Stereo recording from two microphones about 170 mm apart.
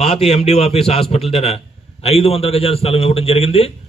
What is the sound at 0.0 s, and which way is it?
A man's voice, 35° left (ahead or behind).